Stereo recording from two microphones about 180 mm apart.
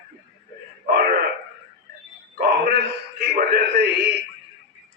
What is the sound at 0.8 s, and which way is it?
Wail, 50° right (ahead or behind).